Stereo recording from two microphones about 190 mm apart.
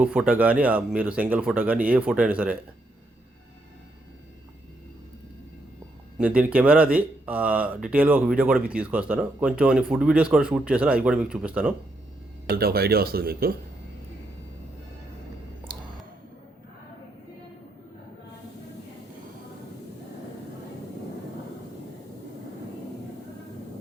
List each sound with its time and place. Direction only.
0.0 s speech: 5° right (ahead or behind)
6.1 s speech: 5° right (ahead or behind)
12.5 s speech: 55° right (ahead or behind)